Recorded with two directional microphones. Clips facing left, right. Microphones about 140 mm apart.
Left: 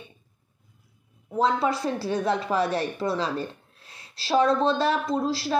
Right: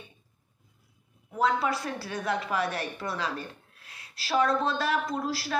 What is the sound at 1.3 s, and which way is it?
A woman's voice, 25° left (ahead or behind).